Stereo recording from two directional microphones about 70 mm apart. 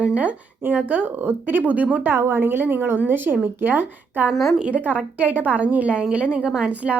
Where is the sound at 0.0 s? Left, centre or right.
Centre.